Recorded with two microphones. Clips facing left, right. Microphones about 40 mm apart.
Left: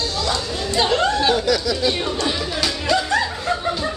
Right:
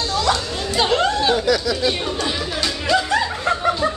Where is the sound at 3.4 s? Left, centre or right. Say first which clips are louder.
Right 3 dB; centre.